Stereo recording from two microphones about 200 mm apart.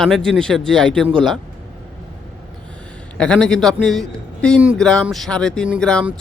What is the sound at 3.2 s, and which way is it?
Speech, 5° left (ahead or behind).